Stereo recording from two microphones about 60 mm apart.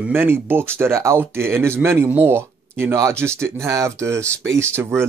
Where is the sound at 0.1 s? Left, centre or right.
Right.